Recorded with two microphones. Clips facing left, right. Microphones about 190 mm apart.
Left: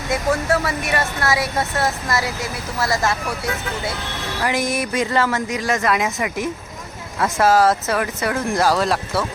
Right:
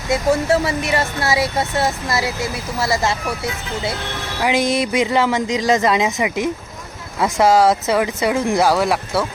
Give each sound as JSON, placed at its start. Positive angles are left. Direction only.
{"t": 0.5, "sound": "speech", "side_deg": -25}
{"t": 4.6, "sound": "speech", "side_deg": -75}
{"t": 4.9, "sound": "speech", "side_deg": -15}